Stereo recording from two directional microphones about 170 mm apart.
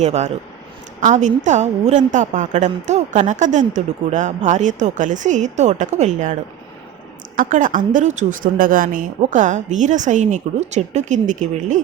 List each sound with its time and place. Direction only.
0.0 s a woman's voice: 40° right (ahead or behind)
7.3 s a woman's voice: 50° right (ahead or behind)